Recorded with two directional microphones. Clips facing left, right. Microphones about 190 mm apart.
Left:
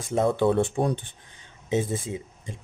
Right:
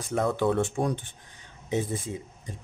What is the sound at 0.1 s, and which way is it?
Speech, 25° left (ahead or behind).